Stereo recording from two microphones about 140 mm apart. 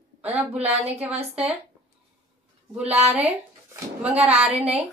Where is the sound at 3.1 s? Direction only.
10° right (ahead or behind).